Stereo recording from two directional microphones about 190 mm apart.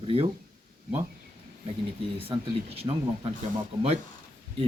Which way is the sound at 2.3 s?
30° right (ahead or behind).